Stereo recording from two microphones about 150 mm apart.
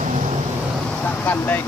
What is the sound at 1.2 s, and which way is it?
Speech, 10° left (ahead or behind).